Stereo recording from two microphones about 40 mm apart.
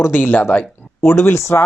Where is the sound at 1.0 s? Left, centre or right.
Left.